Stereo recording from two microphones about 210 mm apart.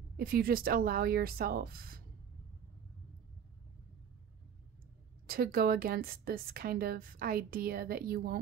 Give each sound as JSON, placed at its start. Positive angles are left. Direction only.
{"t": 0.2, "sound": "a woman's voice", "side_deg": -45}
{"t": 5.2, "sound": "a woman's voice", "side_deg": -45}